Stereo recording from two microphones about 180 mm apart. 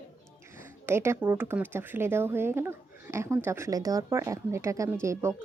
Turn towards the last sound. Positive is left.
turn(degrees=-15)  # may be behind; listen again after turning